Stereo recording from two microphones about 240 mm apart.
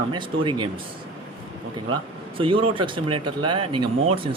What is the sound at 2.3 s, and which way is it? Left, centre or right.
Speech, right.